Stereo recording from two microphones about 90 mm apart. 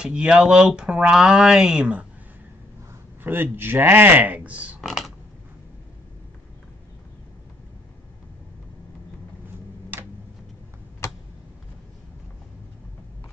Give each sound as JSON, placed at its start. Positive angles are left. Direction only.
{"t": 0.0, "sound": "speech", "side_deg": -10}
{"t": 3.3, "sound": "speech", "side_deg": -25}
{"t": 4.8, "sound": "a sound", "side_deg": 0}